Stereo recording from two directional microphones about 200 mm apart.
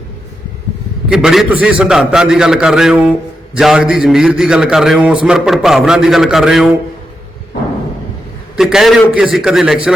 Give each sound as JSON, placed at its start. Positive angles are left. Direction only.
{"t": 1.1, "sound": "a man's voice", "side_deg": -5}
{"t": 8.5, "sound": "a man's voice", "side_deg": 0}